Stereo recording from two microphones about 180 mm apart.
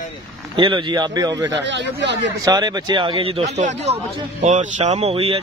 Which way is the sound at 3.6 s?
40° right (ahead or behind).